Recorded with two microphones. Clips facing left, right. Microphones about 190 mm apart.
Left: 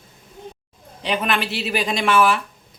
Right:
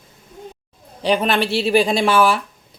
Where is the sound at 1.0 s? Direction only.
35° right (ahead or behind).